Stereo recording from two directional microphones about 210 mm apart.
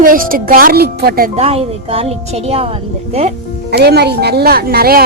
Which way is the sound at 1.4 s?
30° right (ahead or behind).